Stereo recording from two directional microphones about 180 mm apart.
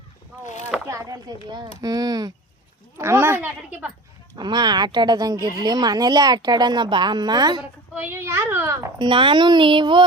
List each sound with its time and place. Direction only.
0.4 s a sound: 40° left (ahead or behind)
0.9 s speech: 20° right (ahead or behind)
4.4 s speech: 25° right (ahead or behind)
7.9 s speech: 10° right (ahead or behind); by 10.0 s 25° right (ahead or behind)